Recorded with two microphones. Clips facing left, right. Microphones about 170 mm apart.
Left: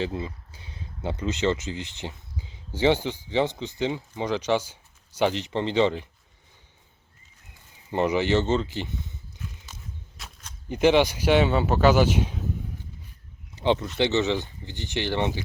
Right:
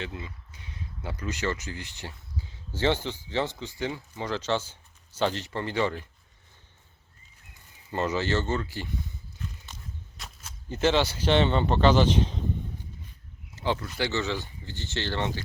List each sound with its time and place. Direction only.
0.0 s speech: 30° left (ahead or behind)
7.9 s speech: 15° left (ahead or behind)
10.2 s a sound: centre (ahead or behind)
10.7 s speech: 15° left (ahead or behind)
13.6 s speech: 20° left (ahead or behind)